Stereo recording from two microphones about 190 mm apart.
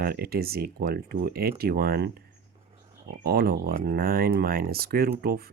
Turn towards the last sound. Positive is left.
turn(degrees=-55)  # may be behind; listen again after turning